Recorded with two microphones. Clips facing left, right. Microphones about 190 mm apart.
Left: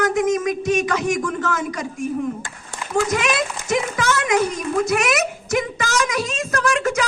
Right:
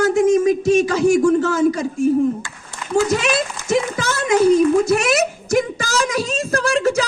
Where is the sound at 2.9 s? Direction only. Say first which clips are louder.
Right 3 dB; 30° right (ahead or behind).